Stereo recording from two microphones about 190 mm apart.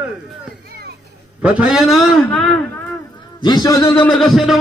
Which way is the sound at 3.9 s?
Centre (ahead or behind).